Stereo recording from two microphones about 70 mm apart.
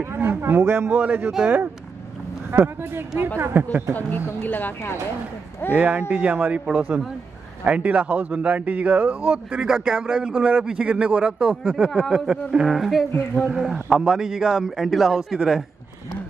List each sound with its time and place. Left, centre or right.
0.1 s a man's voice: right
0.9 s a man's voice: centre
2.5 s a man's voice: right
3.9 s speech: left
5.8 s a man's voice: centre
13.1 s speech: left
13.5 s a man's voice: centre